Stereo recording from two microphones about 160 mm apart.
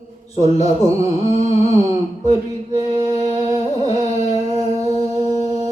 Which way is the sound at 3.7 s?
40° left (ahead or behind).